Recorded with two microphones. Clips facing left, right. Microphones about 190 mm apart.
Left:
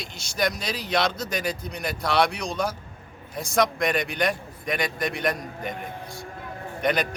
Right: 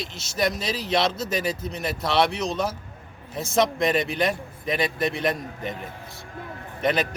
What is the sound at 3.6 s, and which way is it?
A man's voice, 25° right (ahead or behind).